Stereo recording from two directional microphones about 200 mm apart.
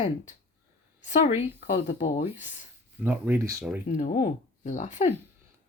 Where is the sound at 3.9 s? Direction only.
35° left (ahead or behind).